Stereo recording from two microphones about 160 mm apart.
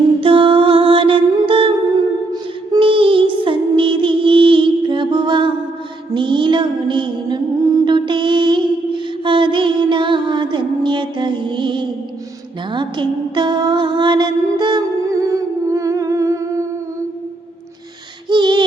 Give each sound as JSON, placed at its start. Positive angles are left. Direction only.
{"t": 0.2, "sound": "mantra", "side_deg": -35}
{"t": 2.3, "sound": "music", "side_deg": -30}
{"t": 6.1, "sound": "mantra", "side_deg": -30}
{"t": 12.7, "sound": "music", "side_deg": -30}
{"t": 18.3, "sound": "a sound", "side_deg": -30}